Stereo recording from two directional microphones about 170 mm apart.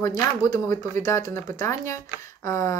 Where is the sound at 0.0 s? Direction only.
20° left (ahead or behind).